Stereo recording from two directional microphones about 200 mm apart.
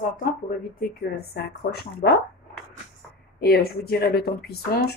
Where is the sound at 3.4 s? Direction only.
50° left (ahead or behind).